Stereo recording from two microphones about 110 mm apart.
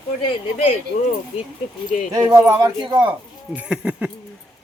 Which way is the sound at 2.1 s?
30° right (ahead or behind).